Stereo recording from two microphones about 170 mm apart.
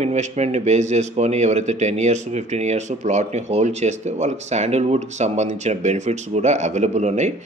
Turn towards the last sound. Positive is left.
turn(degrees=-40)  # may be behind; listen again after turning